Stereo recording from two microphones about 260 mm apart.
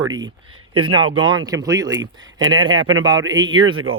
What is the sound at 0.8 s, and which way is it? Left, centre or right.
Speech, right.